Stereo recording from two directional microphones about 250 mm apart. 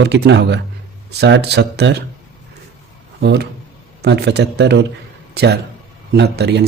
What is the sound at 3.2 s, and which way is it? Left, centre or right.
A man's voice, right.